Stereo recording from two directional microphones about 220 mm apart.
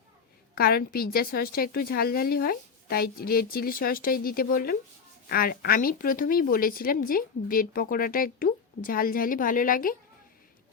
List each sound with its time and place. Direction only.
0.5 s a woman's voice: 45° left (ahead or behind)